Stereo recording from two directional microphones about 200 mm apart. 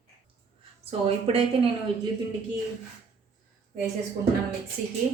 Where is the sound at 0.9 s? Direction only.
30° right (ahead or behind).